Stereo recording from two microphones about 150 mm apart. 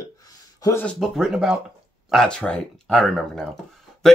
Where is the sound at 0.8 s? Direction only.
Centre (ahead or behind).